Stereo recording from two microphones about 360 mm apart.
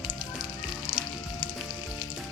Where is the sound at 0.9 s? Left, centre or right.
Left.